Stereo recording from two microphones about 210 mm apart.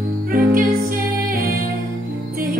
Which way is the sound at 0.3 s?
45° right (ahead or behind).